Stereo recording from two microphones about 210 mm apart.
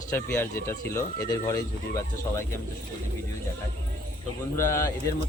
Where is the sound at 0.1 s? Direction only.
10° left (ahead or behind).